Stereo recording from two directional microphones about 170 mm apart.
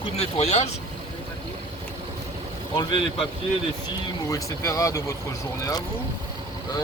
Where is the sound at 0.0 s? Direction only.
35° left (ahead or behind).